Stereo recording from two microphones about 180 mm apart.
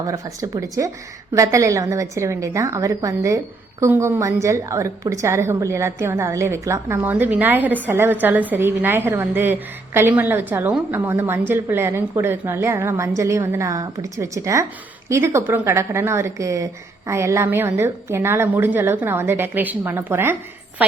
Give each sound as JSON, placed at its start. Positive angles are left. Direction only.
{"t": 0.0, "sound": "a woman's voice", "side_deg": -20}